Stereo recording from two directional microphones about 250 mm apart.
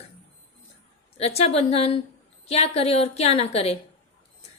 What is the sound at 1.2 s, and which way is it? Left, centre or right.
A woman's voice, left.